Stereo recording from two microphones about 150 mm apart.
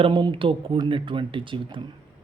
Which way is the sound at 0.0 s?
35° right (ahead or behind).